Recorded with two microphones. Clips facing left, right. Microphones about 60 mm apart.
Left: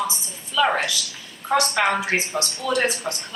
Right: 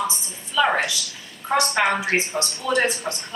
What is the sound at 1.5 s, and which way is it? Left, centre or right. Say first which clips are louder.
Speech: even; right.